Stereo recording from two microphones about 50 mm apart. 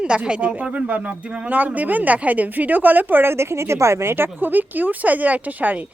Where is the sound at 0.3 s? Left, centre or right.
Right.